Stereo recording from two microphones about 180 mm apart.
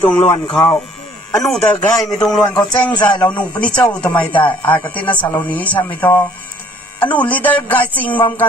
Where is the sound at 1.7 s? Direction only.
20° left (ahead or behind).